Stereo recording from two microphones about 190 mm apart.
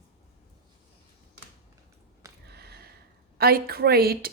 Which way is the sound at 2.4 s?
60° right (ahead or behind).